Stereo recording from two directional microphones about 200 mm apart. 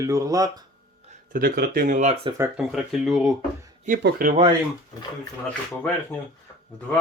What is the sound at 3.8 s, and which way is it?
Speech, 45° right (ahead or behind).